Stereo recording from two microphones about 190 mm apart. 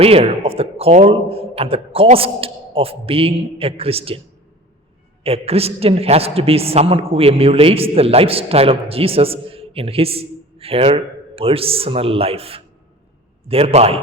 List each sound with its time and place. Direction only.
0.0 s a woman's voice: 30° right (ahead or behind)
5.2 s a woman's voice: 30° right (ahead or behind)